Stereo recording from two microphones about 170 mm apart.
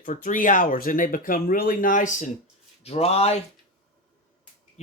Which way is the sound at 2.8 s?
35° left (ahead or behind).